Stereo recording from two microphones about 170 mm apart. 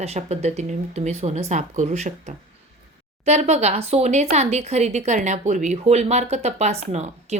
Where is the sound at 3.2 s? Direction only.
40° right (ahead or behind).